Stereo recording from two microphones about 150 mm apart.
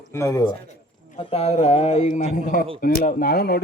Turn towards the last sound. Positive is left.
turn(degrees=90)